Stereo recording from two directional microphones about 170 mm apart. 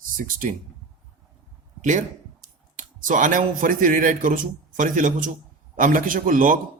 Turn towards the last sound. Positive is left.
turn(degrees=-50)  # may be behind; listen again after turning